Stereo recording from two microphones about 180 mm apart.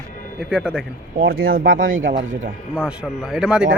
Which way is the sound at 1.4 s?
55° right (ahead or behind).